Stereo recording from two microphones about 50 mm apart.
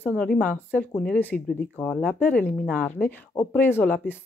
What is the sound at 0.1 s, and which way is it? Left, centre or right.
Speech, centre.